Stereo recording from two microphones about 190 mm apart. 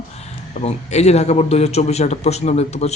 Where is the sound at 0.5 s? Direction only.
35° left (ahead or behind).